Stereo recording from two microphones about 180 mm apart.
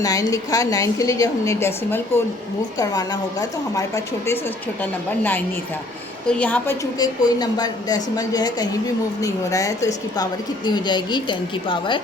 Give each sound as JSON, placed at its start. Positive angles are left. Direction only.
{"t": 0.0, "sound": "a woman's voice", "side_deg": 20}
{"t": 7.0, "sound": "a woman's voice", "side_deg": 20}